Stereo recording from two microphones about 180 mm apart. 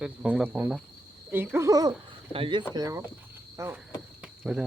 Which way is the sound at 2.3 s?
30° right (ahead or behind).